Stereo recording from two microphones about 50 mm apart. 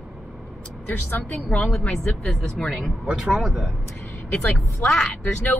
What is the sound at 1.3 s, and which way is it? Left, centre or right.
Speech, left.